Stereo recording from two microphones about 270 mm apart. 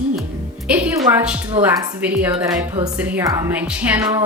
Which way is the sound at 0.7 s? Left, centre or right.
Centre.